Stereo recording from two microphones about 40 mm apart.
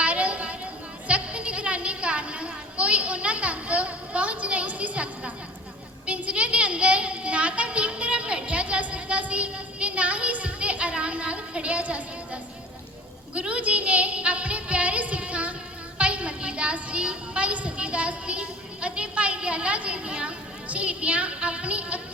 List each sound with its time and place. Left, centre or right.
0.0 s a sound: right
6.1 s a child's voice: right
13.3 s music: right
16.0 s a woman's voice: right